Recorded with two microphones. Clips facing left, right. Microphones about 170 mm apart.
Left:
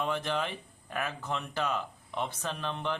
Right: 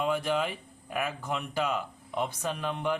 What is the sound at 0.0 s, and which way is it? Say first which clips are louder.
A man's voice: right 3 dB; 10° right (ahead or behind).